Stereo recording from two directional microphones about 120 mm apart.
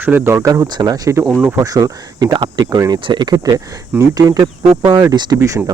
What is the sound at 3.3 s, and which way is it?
Speech, 30° right (ahead or behind).